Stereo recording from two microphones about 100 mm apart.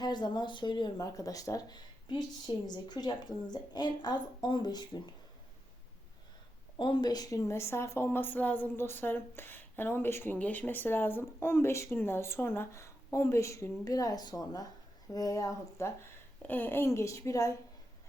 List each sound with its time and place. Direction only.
0.0 s a woman's voice: 45° left (ahead or behind)
0.9 s a woman's voice: 35° left (ahead or behind)
6.7 s a woman's voice: 55° left (ahead or behind); by 15.9 s 35° left (ahead or behind)
16.4 s a woman's voice: 20° left (ahead or behind)